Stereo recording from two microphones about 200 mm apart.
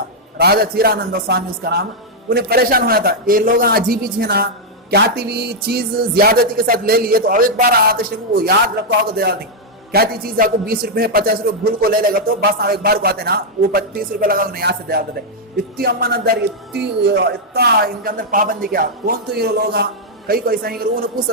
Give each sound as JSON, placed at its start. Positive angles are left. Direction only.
{"t": 0.3, "sound": "a man's voice", "side_deg": -50}